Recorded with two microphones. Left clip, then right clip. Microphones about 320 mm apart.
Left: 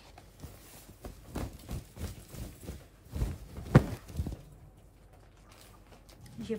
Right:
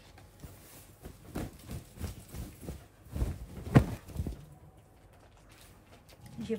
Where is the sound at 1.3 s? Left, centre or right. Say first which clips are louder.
Even; centre.